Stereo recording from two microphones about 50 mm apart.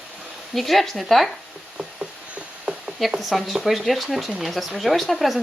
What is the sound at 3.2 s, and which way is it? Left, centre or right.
Speech, centre.